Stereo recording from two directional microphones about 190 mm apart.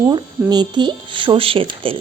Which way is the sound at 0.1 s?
25° right (ahead or behind).